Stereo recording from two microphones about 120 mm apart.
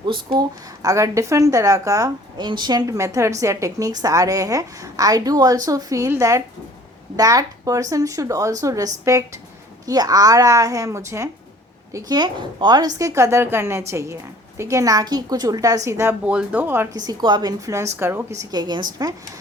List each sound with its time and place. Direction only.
0.0 s speech: 40° right (ahead or behind)
0.8 s a woman's voice: 30° right (ahead or behind)
16.9 s speech: 35° right (ahead or behind)
17.7 s a woman's voice: 25° right (ahead or behind)